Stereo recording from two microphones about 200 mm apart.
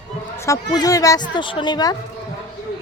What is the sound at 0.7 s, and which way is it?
Speech, 20° left (ahead or behind).